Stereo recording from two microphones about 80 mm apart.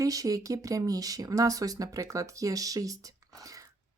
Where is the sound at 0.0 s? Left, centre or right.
Right.